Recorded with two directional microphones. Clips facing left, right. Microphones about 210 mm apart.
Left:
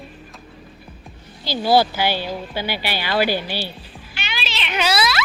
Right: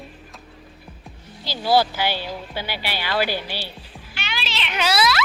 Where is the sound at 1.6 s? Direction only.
20° left (ahead or behind).